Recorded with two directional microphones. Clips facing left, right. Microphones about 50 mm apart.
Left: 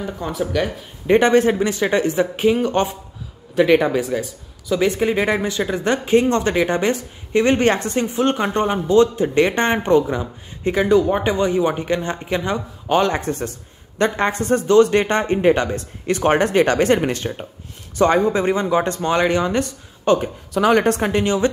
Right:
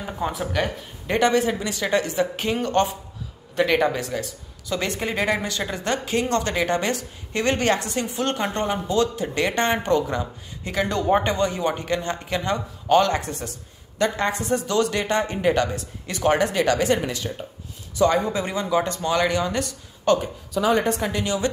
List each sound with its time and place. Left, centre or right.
0.0 s speech: centre
1.0 s a woman's voice: left
13.2 s a woman's voice: left
15.7 s a woman's voice: left
20.5 s a woman's voice: left
21.0 s a woman's voice: left